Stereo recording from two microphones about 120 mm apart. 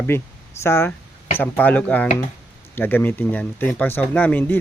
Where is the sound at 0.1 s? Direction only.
20° left (ahead or behind).